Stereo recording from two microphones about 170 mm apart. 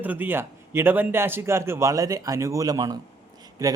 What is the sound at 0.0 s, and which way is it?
Speech, 10° right (ahead or behind).